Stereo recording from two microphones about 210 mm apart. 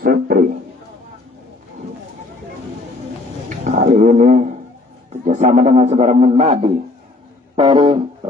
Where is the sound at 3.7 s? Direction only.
35° right (ahead or behind).